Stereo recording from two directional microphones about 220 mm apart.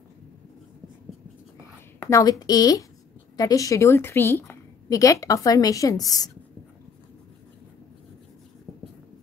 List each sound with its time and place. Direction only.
2.0 s a woman's voice: 15° left (ahead or behind)